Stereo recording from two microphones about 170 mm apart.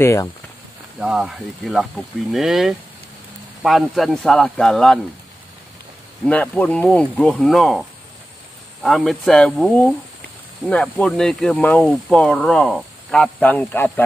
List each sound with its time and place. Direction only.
0.0 s speech: 15° left (ahead or behind)
0.9 s speech: 5° right (ahead or behind)
6.2 s speech: 10° left (ahead or behind)
8.8 s speech: centre (ahead or behind)